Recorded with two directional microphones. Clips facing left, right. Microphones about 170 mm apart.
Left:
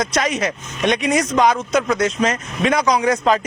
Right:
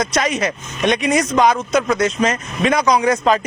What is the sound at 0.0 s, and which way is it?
A man's voice, 10° right (ahead or behind).